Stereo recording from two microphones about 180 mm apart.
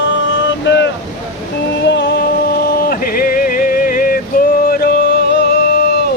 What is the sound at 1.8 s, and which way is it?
Music, 75° left (ahead or behind).